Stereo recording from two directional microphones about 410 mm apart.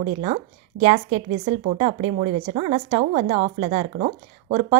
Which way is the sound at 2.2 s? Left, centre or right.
Centre.